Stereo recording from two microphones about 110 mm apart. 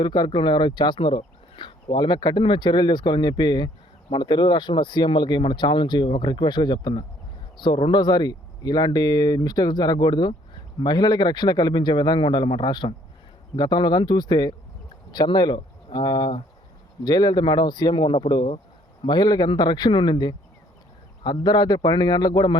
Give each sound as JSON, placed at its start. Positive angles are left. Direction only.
{"t": 0.0, "sound": "speech", "side_deg": 40}